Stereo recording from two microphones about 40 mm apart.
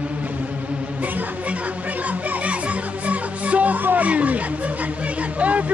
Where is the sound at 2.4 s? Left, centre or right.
Right.